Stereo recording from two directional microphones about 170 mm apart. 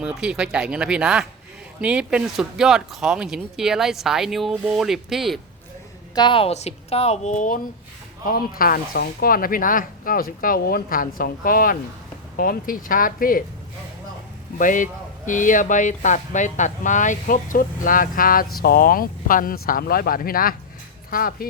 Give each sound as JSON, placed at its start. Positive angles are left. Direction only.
{"t": 0.0, "sound": "speech", "side_deg": -5}
{"t": 6.1, "sound": "a woman's voice", "side_deg": 30}
{"t": 14.6, "sound": "speech", "side_deg": 50}